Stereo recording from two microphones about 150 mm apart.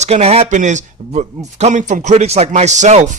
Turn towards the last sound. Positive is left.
turn(degrees=-50)  # may be behind; listen again after turning